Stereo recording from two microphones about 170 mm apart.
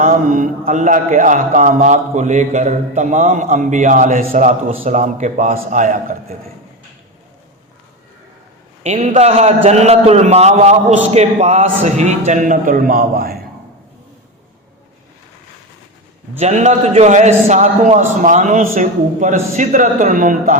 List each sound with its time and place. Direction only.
0.0 s a man's voice: 50° right (ahead or behind)
8.8 s a man's voice: 40° right (ahead or behind); by 13.3 s 60° right (ahead or behind)
16.4 s a man's voice: 45° right (ahead or behind)